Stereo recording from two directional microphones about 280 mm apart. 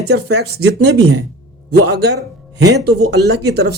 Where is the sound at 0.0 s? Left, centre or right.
Right.